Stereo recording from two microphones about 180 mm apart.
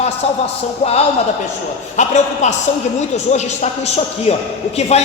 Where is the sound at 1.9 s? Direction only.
40° left (ahead or behind).